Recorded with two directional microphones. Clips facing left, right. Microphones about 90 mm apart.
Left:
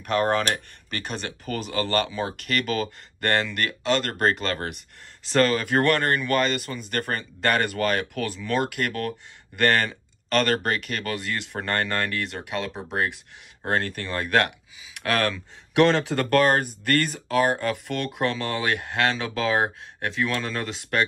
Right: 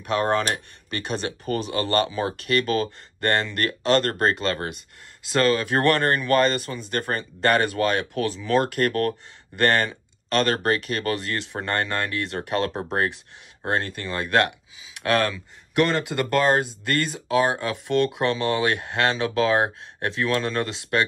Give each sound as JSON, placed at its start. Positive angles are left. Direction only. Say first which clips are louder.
{"t": 0.1, "sound": "speech", "louder": "even", "side_deg": -25}
{"t": 1.2, "sound": "speech", "louder": "right 4 dB", "side_deg": -35}
{"t": 5.7, "sound": "speech", "louder": "right 1 dB", "side_deg": -25}
{"t": 9.6, "sound": "speech", "louder": "right 1 dB", "side_deg": -25}
{"t": 12.4, "sound": "speech", "louder": "right 5 dB", "side_deg": -40}
{"t": 13.7, "sound": "speech", "louder": "even", "side_deg": -25}
{"t": 15.3, "sound": "speech", "louder": "left 2 dB", "side_deg": 0}